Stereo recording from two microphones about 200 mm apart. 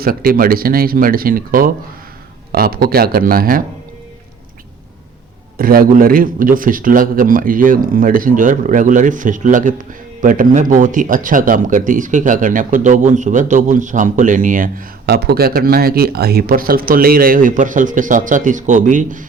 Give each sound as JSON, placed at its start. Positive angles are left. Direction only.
{"t": 0.0, "sound": "a man's voice", "side_deg": -45}
{"t": 5.5, "sound": "a man's voice", "side_deg": -45}